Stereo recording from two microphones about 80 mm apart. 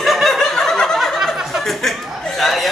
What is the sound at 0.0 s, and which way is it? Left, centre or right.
Snicker, centre.